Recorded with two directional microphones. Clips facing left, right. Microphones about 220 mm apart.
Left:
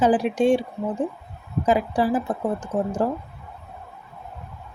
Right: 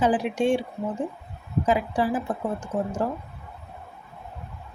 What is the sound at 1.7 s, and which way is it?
Speech, 40° left (ahead or behind).